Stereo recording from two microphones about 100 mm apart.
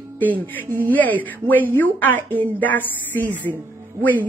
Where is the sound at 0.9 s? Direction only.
15° left (ahead or behind).